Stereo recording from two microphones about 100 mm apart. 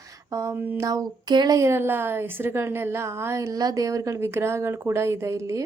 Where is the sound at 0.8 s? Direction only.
35° right (ahead or behind).